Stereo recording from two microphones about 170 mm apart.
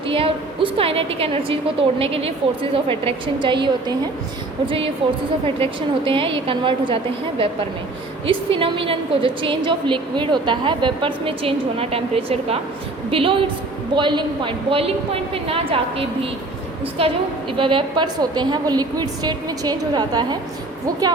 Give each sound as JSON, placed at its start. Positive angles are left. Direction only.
{"t": 0.1, "sound": "a woman's voice", "side_deg": -35}
{"t": 5.0, "sound": "a woman's voice", "side_deg": -30}